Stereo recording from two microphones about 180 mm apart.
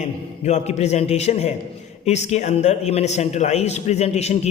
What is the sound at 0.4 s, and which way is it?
A man's voice, 40° left (ahead or behind).